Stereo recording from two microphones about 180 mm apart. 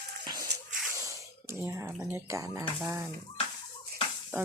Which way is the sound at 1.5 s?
15° right (ahead or behind).